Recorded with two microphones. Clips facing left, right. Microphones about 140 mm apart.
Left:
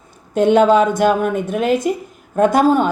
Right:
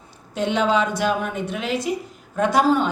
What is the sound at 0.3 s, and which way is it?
A woman's voice, 50° left (ahead or behind).